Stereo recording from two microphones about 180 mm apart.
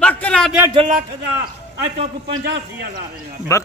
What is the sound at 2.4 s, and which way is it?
Speech, 65° right (ahead or behind).